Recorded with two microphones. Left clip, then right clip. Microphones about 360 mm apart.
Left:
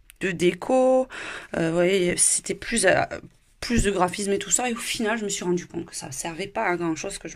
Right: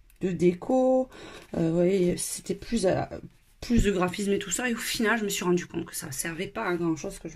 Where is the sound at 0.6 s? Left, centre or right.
Left.